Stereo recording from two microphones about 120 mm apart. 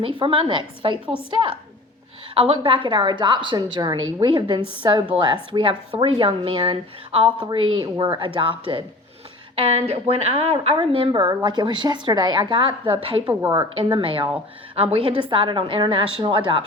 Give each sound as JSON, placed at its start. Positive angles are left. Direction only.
{"t": 0.0, "sound": "a woman's voice", "side_deg": -45}